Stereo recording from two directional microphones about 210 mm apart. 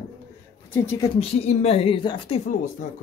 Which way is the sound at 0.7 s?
10° left (ahead or behind).